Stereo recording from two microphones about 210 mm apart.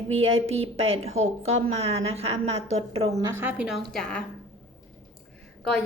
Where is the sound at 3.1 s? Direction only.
15° right (ahead or behind); by 4.2 s 5° left (ahead or behind).